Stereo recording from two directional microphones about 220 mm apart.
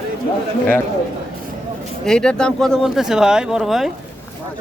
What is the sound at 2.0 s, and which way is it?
Speech, 5° left (ahead or behind).